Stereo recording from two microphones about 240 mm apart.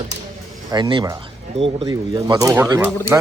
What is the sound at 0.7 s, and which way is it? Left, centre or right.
Speech, centre.